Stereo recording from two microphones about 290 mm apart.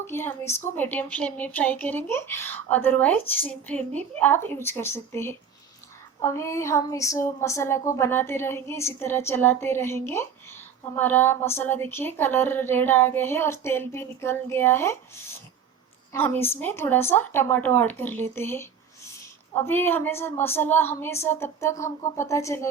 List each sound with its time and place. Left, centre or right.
0.0 s speech: centre
16.1 s speech: centre